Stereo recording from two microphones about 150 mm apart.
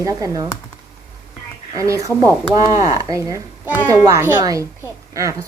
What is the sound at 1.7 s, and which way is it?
Speech, 20° right (ahead or behind).